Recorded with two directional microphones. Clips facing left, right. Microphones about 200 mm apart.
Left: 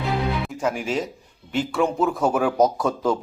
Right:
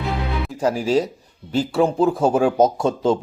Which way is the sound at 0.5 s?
35° right (ahead or behind).